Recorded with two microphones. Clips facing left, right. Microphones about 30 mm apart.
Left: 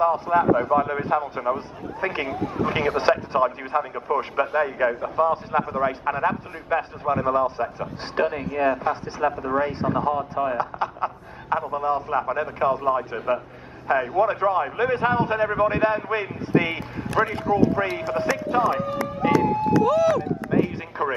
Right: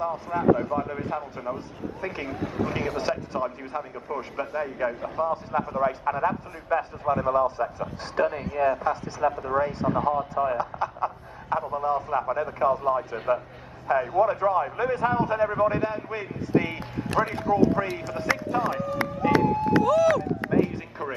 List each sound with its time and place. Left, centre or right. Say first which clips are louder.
0.0 s a man's voice: left 6 dB; left
2.3 s speech: left 3 dB; centre
2.7 s a man's voice: left 7 dB; left
9.3 s speech: left 2 dB; centre
9.6 s a man's voice: left 1 dB; left
9.9 s speech: left 1 dB; centre
10.6 s a man's voice: left 2 dB; left
14.0 s a man's voice: left 1 dB; left
17.2 s speech: left 2 dB; centre
19.0 s run: left 2 dB; left
19.8 s speech: even; centre